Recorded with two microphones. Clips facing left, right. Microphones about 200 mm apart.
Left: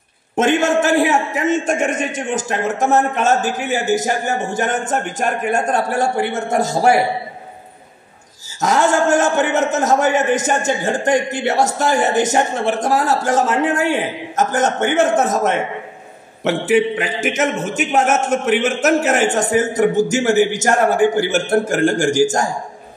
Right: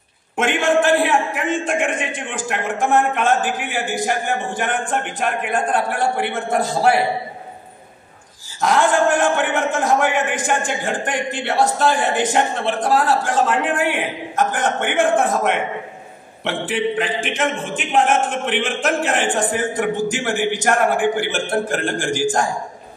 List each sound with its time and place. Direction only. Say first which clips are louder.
0.4 s a man's voice: left 2 dB; 45° left (ahead or behind)
8.5 s a man's voice: left 1 dB; 45° left (ahead or behind)